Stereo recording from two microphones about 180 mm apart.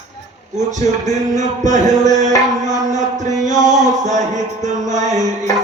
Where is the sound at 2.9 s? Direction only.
40° right (ahead or behind).